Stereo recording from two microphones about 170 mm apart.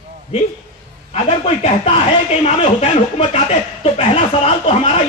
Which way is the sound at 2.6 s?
35° left (ahead or behind).